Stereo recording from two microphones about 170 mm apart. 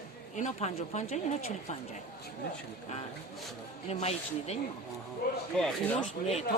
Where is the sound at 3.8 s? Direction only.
40° left (ahead or behind).